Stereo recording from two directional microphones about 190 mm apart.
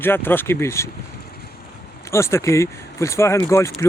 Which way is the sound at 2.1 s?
15° left (ahead or behind).